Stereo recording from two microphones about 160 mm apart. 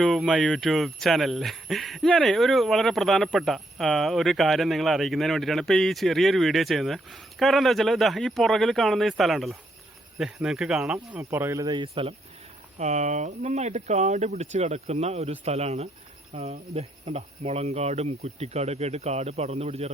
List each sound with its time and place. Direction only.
0.0 s speech: centre (ahead or behind); by 12.1 s 30° right (ahead or behind)
12.8 s speech: 45° right (ahead or behind)